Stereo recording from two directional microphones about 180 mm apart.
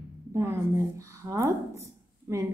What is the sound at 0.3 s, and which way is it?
A woman's voice, 15° right (ahead or behind).